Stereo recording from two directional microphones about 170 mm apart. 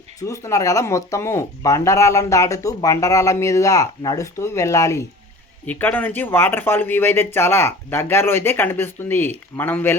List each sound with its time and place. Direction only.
0.2 s speech: 20° left (ahead or behind)